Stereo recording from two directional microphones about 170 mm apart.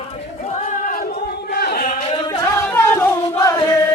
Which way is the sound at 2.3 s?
20° left (ahead or behind).